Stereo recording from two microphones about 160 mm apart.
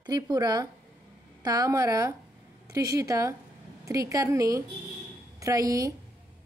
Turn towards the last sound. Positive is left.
turn(degrees=-20)  # may be behind; listen again after turning